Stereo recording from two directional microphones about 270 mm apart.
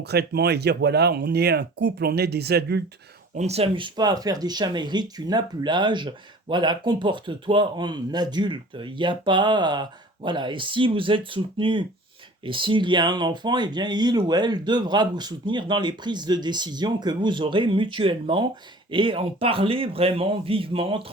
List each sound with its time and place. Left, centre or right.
0.0 s speech: right
3.3 s speech: right